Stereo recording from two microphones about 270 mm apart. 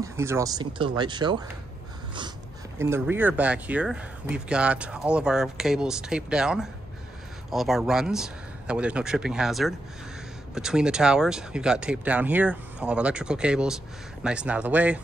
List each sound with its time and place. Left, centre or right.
0.0 s speech: centre
2.8 s speech: centre